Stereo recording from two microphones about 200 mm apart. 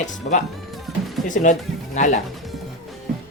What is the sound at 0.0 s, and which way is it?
Speech, 40° left (ahead or behind).